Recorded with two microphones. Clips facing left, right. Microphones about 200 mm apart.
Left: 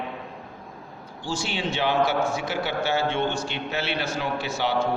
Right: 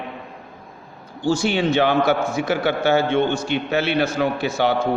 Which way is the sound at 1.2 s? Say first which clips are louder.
Right 10 dB; 55° right (ahead or behind).